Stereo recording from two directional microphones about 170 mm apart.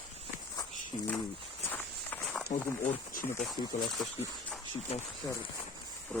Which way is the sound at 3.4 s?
Centre (ahead or behind).